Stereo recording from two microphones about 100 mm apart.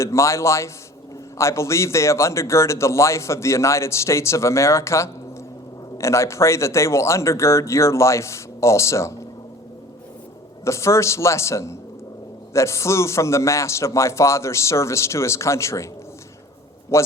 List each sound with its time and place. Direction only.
0.0 s a man's voice: 30° left (ahead or behind)
10.6 s a man's voice: 30° left (ahead or behind)
16.9 s a man's voice: 30° left (ahead or behind)